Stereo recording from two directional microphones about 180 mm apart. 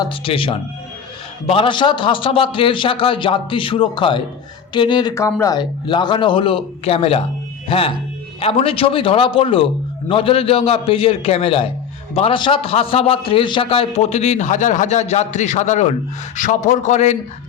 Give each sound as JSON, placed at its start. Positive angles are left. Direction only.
{"t": 0.0, "sound": "a man's voice", "side_deg": 30}